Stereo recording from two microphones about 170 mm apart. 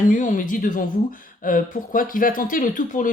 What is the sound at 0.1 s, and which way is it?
Speech, 50° left (ahead or behind).